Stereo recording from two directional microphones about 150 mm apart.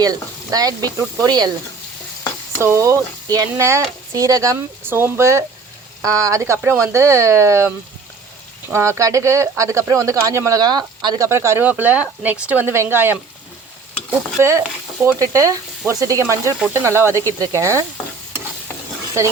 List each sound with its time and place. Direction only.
0.0 s speech: 25° right (ahead or behind)
2.6 s speech: 20° right (ahead or behind)
8.7 s speech: 20° right (ahead or behind)
11.3 s speech: 15° right (ahead or behind)